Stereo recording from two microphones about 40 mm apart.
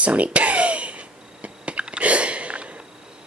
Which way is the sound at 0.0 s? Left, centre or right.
Right.